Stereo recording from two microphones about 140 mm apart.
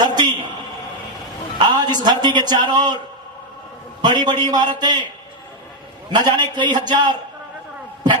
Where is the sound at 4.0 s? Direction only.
30° right (ahead or behind).